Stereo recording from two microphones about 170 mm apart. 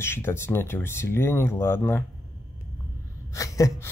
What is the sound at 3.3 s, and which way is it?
Gasp, 20° left (ahead or behind).